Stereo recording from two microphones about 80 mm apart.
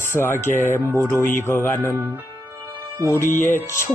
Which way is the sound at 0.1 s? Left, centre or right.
Left.